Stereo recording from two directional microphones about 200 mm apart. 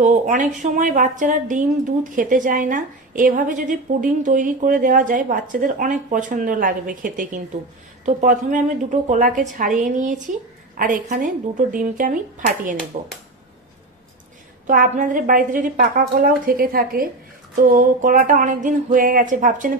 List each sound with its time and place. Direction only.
0.0 s a woman's voice: 40° right (ahead or behind)
14.7 s a woman's voice: 40° right (ahead or behind)